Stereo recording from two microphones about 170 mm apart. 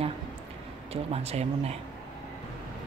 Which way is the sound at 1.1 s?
40° right (ahead or behind).